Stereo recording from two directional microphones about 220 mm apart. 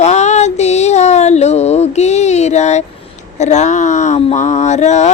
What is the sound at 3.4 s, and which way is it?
Speech, 30° left (ahead or behind).